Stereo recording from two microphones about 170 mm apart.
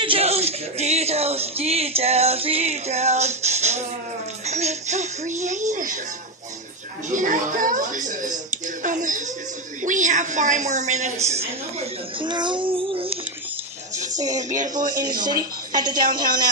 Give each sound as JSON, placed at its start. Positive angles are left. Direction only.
{"t": 0.0, "sound": "music", "side_deg": -35}
{"t": 4.5, "sound": "a child's voice", "side_deg": -40}
{"t": 7.1, "sound": "a woman's voice", "side_deg": -50}
{"t": 8.5, "sound": "a sound", "side_deg": -50}
{"t": 9.8, "sound": "a woman's voice", "side_deg": -50}
{"t": 12.3, "sound": "child singing", "side_deg": -25}
{"t": 14.1, "sound": "a woman's voice", "side_deg": -20}